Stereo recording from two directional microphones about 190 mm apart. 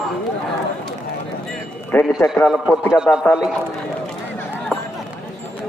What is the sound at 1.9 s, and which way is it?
A man's voice, 10° left (ahead or behind).